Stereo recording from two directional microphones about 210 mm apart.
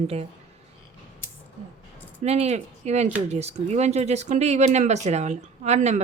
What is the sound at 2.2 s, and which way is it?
A woman's voice, 30° right (ahead or behind).